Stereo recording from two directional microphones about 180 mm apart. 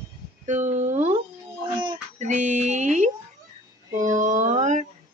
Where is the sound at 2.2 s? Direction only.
45° right (ahead or behind).